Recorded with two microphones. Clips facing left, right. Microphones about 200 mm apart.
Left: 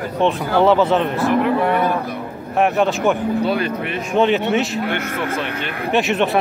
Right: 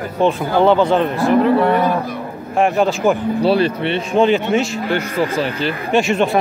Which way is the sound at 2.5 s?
Centre (ahead or behind).